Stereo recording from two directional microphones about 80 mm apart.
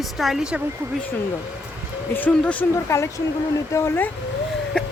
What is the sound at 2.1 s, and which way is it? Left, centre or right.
Speech, centre.